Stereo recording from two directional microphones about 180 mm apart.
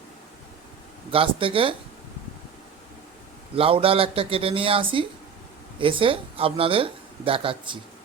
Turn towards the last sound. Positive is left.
turn(degrees=-30)  # may be behind; listen again after turning